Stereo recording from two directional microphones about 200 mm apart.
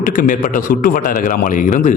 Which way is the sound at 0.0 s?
40° left (ahead or behind).